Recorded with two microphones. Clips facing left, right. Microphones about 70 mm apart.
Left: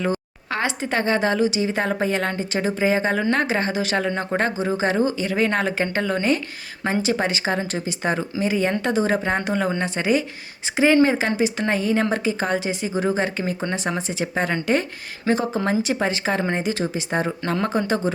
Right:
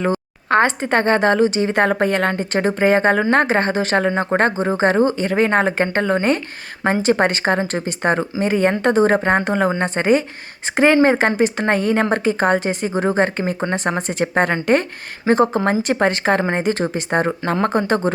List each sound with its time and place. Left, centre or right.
0.0 s a woman's voice: right